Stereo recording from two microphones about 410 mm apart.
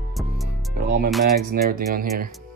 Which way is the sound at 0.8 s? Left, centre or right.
Right.